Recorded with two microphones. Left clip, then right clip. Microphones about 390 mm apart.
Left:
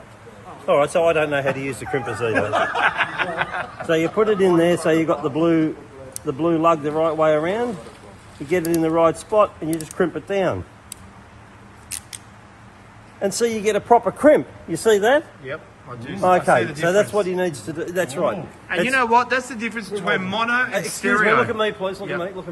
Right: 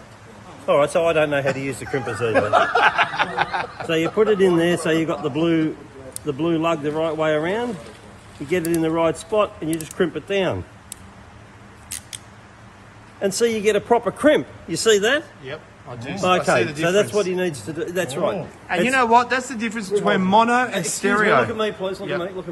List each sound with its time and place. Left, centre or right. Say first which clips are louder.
0.7 s speech: left 1 dB; centre
2.5 s speech: right 4 dB; right
3.6 s speech: left 1 dB; centre
11.9 s scissors: even; centre
13.2 s speech: right 1 dB; centre